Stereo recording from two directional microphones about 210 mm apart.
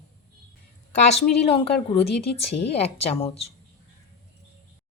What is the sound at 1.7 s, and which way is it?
Speech, 30° left (ahead or behind).